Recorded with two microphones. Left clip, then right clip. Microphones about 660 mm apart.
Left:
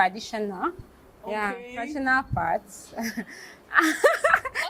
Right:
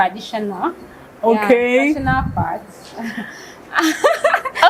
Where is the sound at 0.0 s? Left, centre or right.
Left.